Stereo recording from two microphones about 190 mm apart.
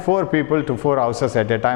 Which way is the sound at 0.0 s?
20° left (ahead or behind).